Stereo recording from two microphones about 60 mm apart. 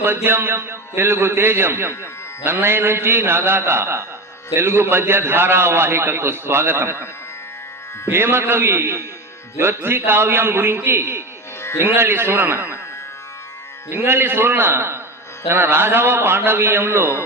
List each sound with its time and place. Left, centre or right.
0.0 s a man's voice: right
8.1 s a man's voice: right
13.9 s a man's voice: right